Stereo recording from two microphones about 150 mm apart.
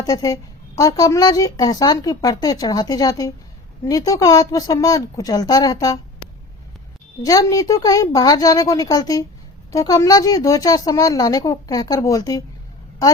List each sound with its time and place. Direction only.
0.0 s speech: 25° left (ahead or behind)
7.3 s speech: 25° left (ahead or behind)